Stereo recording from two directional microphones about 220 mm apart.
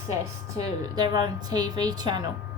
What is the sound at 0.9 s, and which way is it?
A woman's voice, 20° right (ahead or behind).